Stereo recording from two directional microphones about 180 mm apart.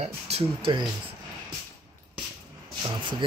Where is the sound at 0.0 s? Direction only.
35° right (ahead or behind).